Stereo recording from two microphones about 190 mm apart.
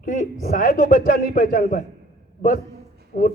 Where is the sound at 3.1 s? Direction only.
50° left (ahead or behind).